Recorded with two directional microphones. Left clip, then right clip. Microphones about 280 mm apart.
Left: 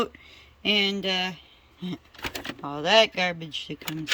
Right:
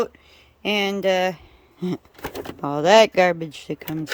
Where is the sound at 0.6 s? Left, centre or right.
Centre.